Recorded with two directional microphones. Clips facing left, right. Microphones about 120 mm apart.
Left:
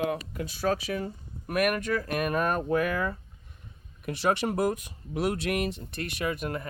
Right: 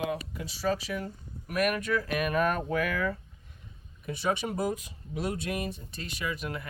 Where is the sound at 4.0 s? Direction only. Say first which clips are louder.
Left 3 dB; 70° left (ahead or behind).